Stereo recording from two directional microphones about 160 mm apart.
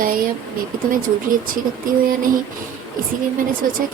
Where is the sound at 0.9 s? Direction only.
60° right (ahead or behind).